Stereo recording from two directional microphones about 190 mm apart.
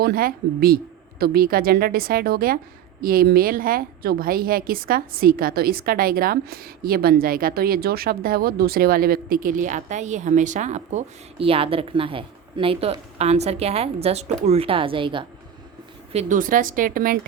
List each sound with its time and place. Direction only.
0.0 s a woman's voice: 50° right (ahead or behind); by 15.2 s 25° right (ahead or behind)
16.1 s a woman's voice: 45° right (ahead or behind)